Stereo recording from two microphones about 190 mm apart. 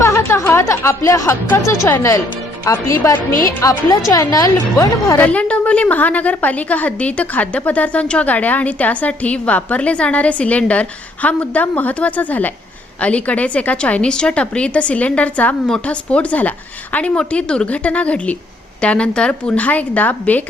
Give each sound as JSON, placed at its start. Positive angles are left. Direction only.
{"t": 0.0, "sound": "a woman's voice", "side_deg": 15}